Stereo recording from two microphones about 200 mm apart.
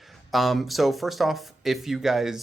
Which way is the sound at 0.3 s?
Centre (ahead or behind).